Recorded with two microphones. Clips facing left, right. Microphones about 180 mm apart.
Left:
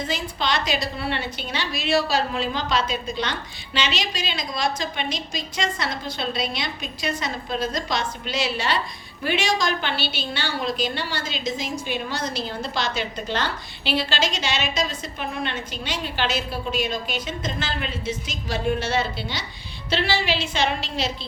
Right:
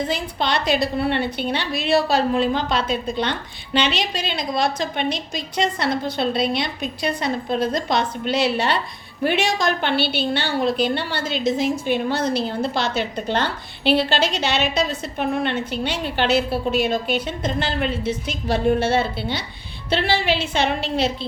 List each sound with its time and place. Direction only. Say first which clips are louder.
0.1 s a woman's voice: right 3 dB; 60° right (ahead or behind)